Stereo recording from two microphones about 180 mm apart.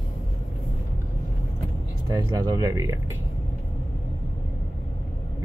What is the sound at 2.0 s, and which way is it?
Speech, 20° right (ahead or behind).